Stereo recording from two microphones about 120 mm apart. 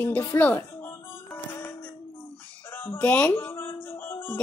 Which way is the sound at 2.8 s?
15° left (ahead or behind).